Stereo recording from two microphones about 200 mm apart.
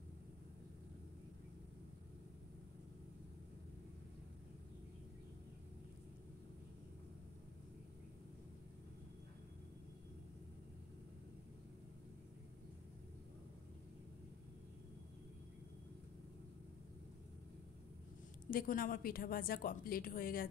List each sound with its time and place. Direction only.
18.5 s a woman's voice: 45° left (ahead or behind)